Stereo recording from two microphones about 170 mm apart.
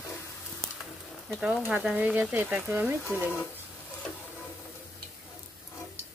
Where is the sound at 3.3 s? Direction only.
15° left (ahead or behind).